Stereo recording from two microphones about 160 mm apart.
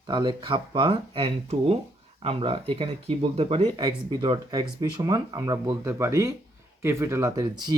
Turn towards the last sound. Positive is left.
turn(degrees=-25)  # may be behind; listen again after turning